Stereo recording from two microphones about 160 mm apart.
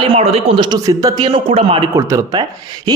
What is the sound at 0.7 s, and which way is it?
Speech, 25° right (ahead or behind).